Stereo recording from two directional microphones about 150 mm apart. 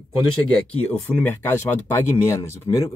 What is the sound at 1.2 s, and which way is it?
Speech, 15° left (ahead or behind).